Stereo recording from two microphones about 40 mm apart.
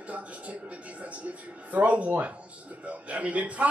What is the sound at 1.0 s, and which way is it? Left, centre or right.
Speech, right.